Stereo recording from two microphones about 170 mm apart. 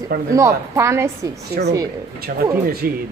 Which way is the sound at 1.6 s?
60° right (ahead or behind).